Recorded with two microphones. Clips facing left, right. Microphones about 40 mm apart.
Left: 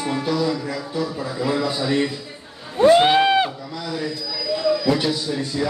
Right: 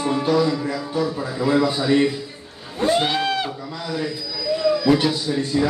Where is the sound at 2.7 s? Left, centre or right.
Left.